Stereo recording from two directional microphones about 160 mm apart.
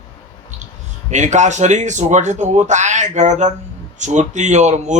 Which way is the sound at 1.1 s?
50° right (ahead or behind).